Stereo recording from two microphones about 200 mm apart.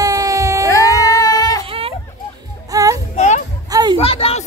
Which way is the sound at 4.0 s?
30° left (ahead or behind).